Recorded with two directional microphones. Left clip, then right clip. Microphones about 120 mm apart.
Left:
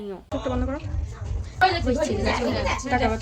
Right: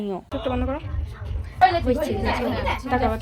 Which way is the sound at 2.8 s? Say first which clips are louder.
Right 1 dB; 25° left (ahead or behind).